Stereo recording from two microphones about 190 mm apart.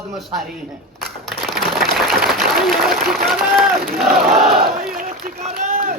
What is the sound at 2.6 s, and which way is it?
Speech, centre (ahead or behind).